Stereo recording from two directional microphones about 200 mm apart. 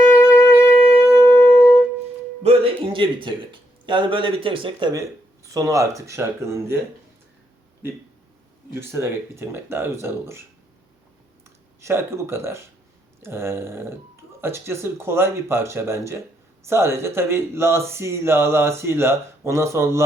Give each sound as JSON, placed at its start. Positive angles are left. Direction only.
{"t": 0.0, "sound": "wind instrument", "side_deg": 10}
{"t": 1.5, "sound": "music", "side_deg": 15}
{"t": 2.4, "sound": "music", "side_deg": -30}
{"t": 3.8, "sound": "speech", "side_deg": -25}
{"t": 8.7, "sound": "speech", "side_deg": -15}
{"t": 11.8, "sound": "speech", "side_deg": -15}